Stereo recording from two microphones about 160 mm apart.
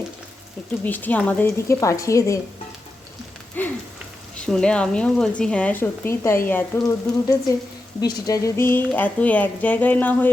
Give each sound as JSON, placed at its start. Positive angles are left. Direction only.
{"t": 0.9, "sound": "speech", "side_deg": 10}
{"t": 3.6, "sound": "speech", "side_deg": 10}
{"t": 6.5, "sound": "frying", "side_deg": 15}
{"t": 8.0, "sound": "speech", "side_deg": 20}